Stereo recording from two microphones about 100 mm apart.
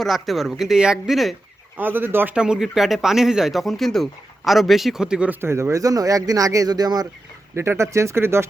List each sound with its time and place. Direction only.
0.0 s speech: centre (ahead or behind)
1.7 s speech: 20° right (ahead or behind)
2.3 s speech: 10° right (ahead or behind)
5.4 s speech: 25° right (ahead or behind); by 7.1 s 40° right (ahead or behind)
7.5 s speech: 25° right (ahead or behind)